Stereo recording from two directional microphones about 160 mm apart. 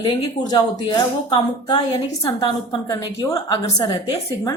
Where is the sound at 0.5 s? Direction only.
25° left (ahead or behind).